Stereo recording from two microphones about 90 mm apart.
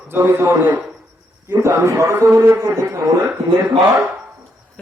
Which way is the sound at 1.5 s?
30° right (ahead or behind).